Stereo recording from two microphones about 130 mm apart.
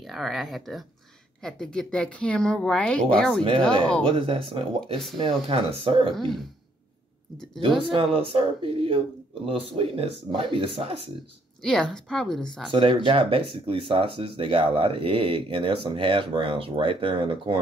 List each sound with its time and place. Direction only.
0.0 s a woman's voice: centre (ahead or behind)
4.2 s speech: 45° right (ahead or behind)
6.1 s speech: centre (ahead or behind)
7.9 s speech: 45° right (ahead or behind)
11.6 s speech: 5° left (ahead or behind)
12.7 s speech: 40° right (ahead or behind)